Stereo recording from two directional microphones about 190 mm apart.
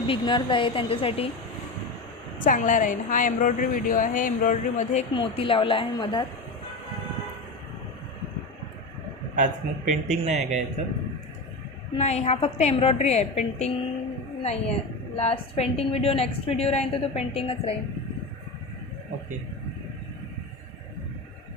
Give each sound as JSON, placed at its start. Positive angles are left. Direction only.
{"t": 0.1, "sound": "a woman's voice", "side_deg": 25}
{"t": 2.4, "sound": "a woman's voice", "side_deg": 45}
{"t": 5.1, "sound": "a woman's voice", "side_deg": 25}
{"t": 9.4, "sound": "speech", "side_deg": -40}
{"t": 11.9, "sound": "a woman's voice", "side_deg": 35}